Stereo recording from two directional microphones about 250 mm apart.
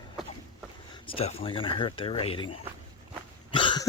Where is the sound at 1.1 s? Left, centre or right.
Left.